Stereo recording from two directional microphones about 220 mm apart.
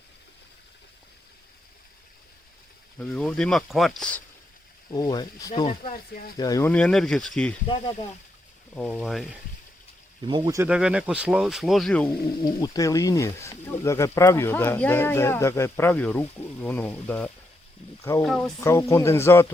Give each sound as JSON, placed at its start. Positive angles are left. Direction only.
{"t": 3.0, "sound": "speech", "side_deg": 5}
{"t": 4.9, "sound": "speech", "side_deg": 15}
{"t": 5.8, "sound": "speech", "side_deg": 35}
{"t": 6.3, "sound": "speech", "side_deg": 15}
{"t": 8.7, "sound": "speech", "side_deg": 5}
{"t": 10.2, "sound": "speech", "side_deg": -20}
{"t": 12.5, "sound": "speech", "side_deg": 15}
{"t": 18.6, "sound": "speech", "side_deg": 15}